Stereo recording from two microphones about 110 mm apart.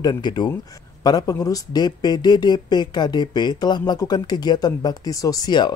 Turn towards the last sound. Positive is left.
turn(degrees=40)  # may be behind; listen again after turning